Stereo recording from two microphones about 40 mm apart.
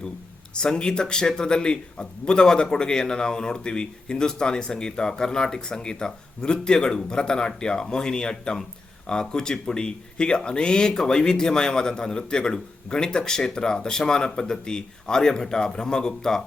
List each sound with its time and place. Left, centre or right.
0.5 s a man's voice: left